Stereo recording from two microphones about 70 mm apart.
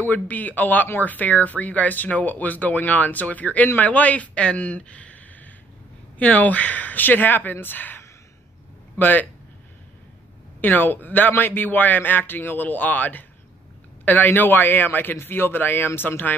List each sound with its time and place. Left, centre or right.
0.0 s a man's voice: left
10.6 s speech: left